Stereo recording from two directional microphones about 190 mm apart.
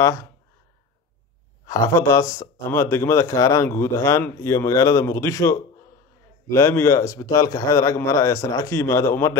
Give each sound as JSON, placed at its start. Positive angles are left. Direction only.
{"t": 0.0, "sound": "speech", "side_deg": 15}
{"t": 1.7, "sound": "speech", "side_deg": 15}